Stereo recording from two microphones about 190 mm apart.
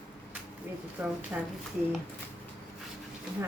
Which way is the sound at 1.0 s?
10° right (ahead or behind).